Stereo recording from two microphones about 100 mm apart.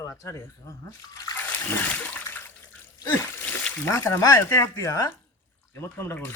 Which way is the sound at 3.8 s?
30° left (ahead or behind).